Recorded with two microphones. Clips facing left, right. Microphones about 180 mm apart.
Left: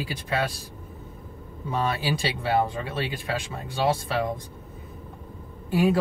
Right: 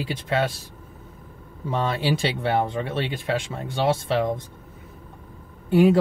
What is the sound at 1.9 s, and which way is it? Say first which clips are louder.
Speech: right 3 dB; 25° right (ahead or behind).